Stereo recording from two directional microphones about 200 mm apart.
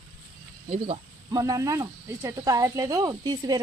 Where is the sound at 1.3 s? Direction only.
15° right (ahead or behind).